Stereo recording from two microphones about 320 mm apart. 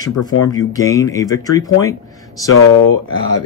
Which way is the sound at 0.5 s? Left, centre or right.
Centre.